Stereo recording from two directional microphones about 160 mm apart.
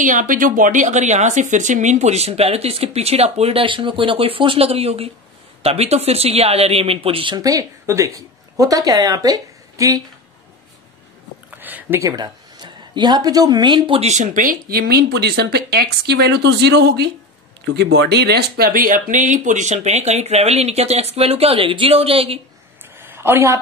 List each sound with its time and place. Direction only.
0.0 s a woman's voice: 55° right (ahead or behind); by 10.0 s 20° right (ahead or behind)
11.5 s speech: 10° right (ahead or behind); by 22.4 s 35° right (ahead or behind)
22.9 s a sound: 15° right (ahead or behind)